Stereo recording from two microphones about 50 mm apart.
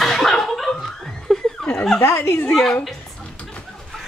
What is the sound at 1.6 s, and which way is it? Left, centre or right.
Speech, centre.